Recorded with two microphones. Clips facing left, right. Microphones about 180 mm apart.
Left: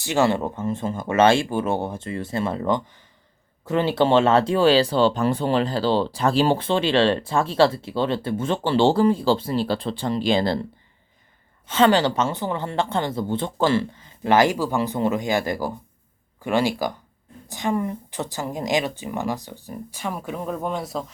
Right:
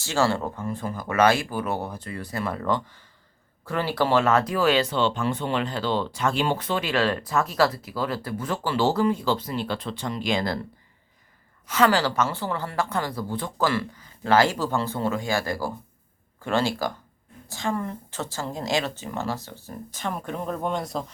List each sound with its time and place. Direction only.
0.0 s speech: 20° left (ahead or behind)
11.7 s speech: 25° left (ahead or behind); by 21.1 s centre (ahead or behind)